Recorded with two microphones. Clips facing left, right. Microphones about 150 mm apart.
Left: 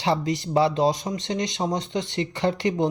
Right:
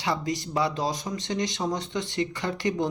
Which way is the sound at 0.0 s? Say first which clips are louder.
Left 4 dB; 25° left (ahead or behind).